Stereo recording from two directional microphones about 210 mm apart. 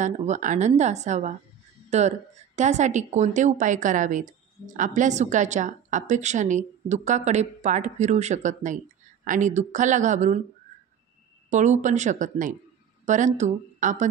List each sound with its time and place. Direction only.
0.0 s speech: 35° right (ahead or behind)
11.5 s speech: 35° right (ahead or behind)